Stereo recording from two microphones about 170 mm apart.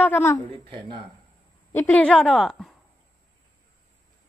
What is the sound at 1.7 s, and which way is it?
A woman's voice, 10° left (ahead or behind).